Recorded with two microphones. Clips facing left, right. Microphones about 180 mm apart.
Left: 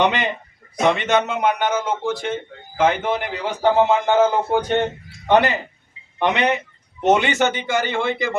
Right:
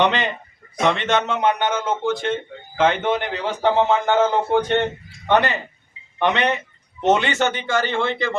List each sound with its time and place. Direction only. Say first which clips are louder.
0.0 s a man's voice: even; 15° left (ahead or behind)